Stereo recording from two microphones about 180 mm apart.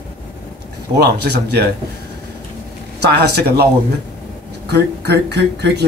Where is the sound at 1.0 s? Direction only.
65° right (ahead or behind).